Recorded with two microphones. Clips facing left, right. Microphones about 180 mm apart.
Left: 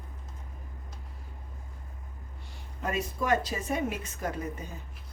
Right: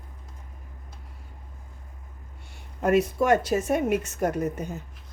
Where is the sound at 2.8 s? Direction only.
70° right (ahead or behind).